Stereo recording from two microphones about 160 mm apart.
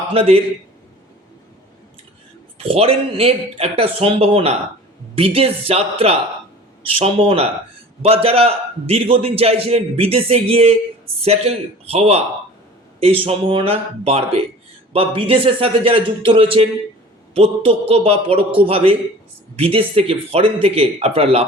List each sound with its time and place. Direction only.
0.1 s a man's voice: 35° right (ahead or behind)
2.6 s a man's voice: 35° right (ahead or behind)